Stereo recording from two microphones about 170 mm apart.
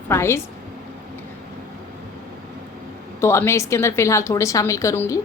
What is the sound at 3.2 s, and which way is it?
A woman's voice, 15° left (ahead or behind).